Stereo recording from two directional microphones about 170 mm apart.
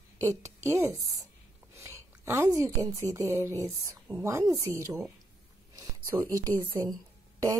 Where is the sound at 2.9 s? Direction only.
20° right (ahead or behind).